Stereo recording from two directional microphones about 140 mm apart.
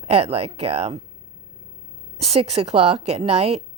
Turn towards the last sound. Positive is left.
turn(degrees=-50)  # may be behind; listen again after turning